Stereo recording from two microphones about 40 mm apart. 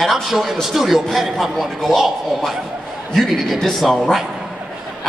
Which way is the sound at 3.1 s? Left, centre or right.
Centre.